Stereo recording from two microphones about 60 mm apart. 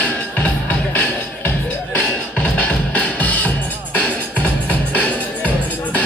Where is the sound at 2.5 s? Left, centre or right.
Left.